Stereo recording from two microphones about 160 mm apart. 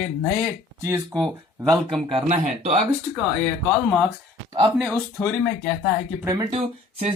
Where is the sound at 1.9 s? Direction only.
30° right (ahead or behind).